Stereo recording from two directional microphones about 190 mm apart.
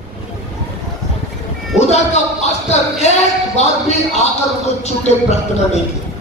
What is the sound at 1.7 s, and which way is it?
Speech, 35° left (ahead or behind).